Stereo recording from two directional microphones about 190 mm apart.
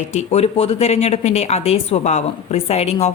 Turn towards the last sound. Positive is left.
turn(degrees=35)  # may be behind; listen again after turning